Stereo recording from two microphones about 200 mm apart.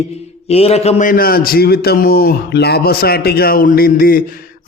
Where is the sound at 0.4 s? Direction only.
30° left (ahead or behind).